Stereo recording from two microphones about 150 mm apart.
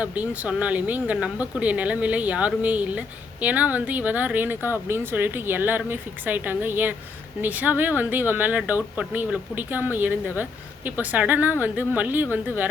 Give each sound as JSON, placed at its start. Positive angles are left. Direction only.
{"t": 0.0, "sound": "speech", "side_deg": -10}